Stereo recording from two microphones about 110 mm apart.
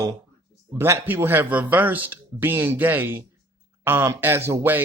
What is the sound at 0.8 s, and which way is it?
Speech, 25° right (ahead or behind).